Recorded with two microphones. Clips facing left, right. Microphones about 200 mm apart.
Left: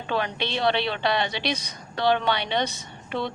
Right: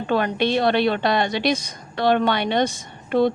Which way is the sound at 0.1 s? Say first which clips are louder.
Right 7 dB; 50° right (ahead or behind).